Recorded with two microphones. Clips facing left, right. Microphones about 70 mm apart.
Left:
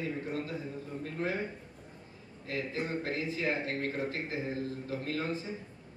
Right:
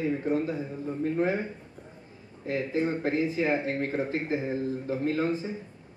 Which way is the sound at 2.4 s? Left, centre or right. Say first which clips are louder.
Right 7 dB; right.